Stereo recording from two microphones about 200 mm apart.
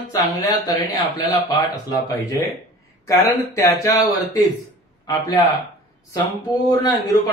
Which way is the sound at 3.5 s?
15° left (ahead or behind).